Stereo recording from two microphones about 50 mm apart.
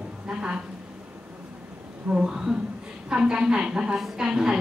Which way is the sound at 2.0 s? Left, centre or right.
Centre.